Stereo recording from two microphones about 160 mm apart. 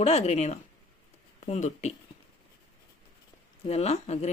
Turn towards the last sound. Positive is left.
turn(degrees=40)  # may be behind; listen again after turning